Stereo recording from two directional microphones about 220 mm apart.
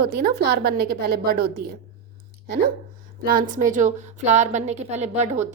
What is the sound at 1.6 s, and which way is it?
Speech, 45° right (ahead or behind).